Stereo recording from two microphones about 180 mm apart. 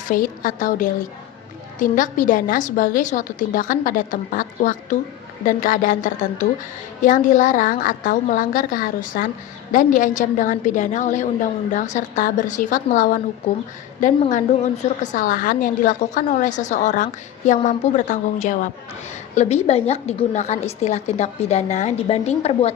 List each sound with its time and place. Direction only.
0.0 s a woman's voice: 50° left (ahead or behind)